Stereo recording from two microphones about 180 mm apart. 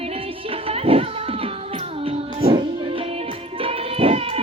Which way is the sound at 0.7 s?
30° right (ahead or behind).